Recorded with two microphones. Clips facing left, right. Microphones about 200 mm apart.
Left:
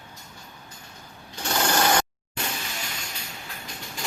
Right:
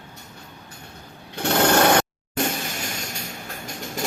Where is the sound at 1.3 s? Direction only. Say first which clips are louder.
Right 7 dB; 60° right (ahead or behind).